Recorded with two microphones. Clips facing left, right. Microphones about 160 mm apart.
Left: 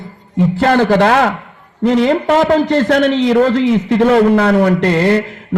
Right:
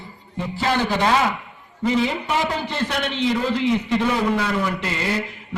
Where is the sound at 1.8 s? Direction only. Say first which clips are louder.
Left 9 dB; 80° left.